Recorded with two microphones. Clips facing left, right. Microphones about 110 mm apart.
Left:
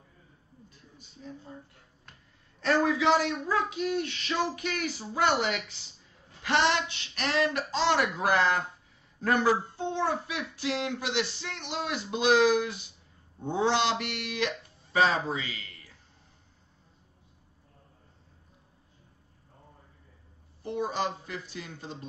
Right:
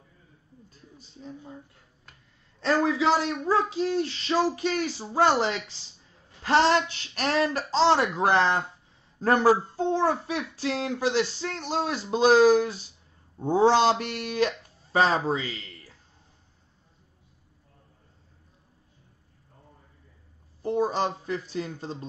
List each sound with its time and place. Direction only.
1.2 s speech: 30° right (ahead or behind)
2.6 s speech: 25° right (ahead or behind)
20.6 s speech: 35° right (ahead or behind)